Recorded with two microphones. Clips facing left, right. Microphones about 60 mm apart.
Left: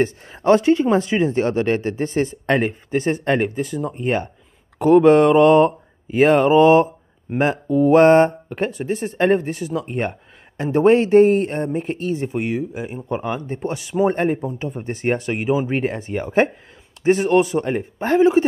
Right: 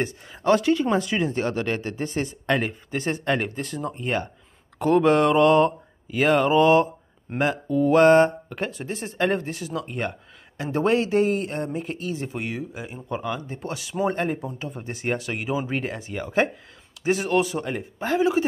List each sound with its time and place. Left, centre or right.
0.0 s speech: left; by 4.0 s centre
4.0 s speech: left
7.3 s mantra: centre
7.9 s speech: left